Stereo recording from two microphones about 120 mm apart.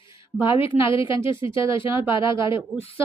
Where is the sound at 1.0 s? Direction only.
25° right (ahead or behind).